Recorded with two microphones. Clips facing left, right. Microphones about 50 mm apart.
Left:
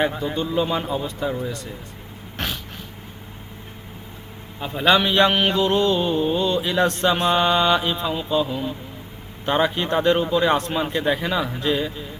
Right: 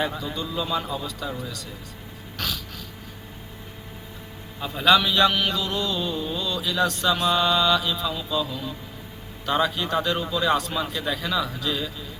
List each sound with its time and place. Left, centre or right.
0.0 s mantra: left
2.4 s dog: left
4.6 s mantra: left